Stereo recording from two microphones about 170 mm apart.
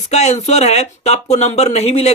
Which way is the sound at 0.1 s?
40° left (ahead or behind).